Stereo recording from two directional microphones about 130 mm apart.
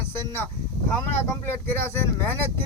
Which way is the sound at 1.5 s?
20° left (ahead or behind).